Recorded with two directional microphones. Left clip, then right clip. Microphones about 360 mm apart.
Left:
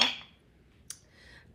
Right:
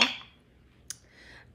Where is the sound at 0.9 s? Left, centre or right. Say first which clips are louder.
Right 4 dB; centre.